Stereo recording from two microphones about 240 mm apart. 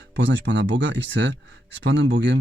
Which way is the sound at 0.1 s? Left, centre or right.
Right.